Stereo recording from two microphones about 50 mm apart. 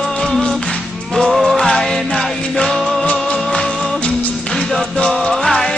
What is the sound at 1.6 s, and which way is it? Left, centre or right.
Music, centre.